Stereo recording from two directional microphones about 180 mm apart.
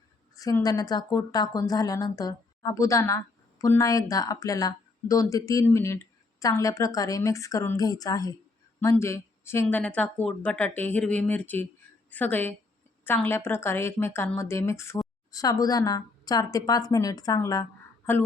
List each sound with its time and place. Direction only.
0.3 s a woman's voice: 20° left (ahead or behind)